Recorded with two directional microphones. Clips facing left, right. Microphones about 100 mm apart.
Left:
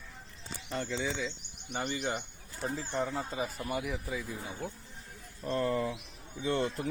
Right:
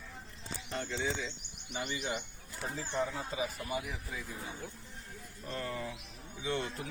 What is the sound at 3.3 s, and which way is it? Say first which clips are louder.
Speech: left 2 dB; 55° left (ahead or behind).